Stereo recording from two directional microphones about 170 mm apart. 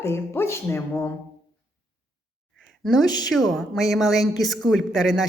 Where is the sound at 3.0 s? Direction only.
25° left (ahead or behind).